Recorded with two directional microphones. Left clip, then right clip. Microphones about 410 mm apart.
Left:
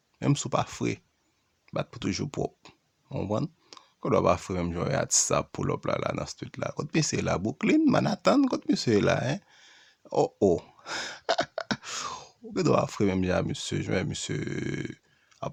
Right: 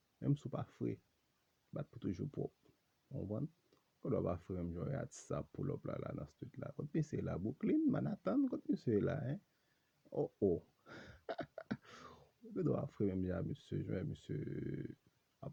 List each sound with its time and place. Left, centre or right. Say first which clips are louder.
0.2 s speech: left 16 dB; centre
4.0 s speech: left 16 dB; centre
10.1 s speech: left 13 dB; left
10.8 s speech: left 19 dB; centre